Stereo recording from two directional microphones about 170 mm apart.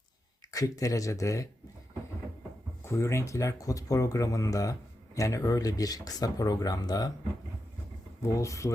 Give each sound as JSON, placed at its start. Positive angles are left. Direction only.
{"t": 0.5, "sound": "speech", "side_deg": 20}
{"t": 2.8, "sound": "speech", "side_deg": 15}
{"t": 8.2, "sound": "speech", "side_deg": 20}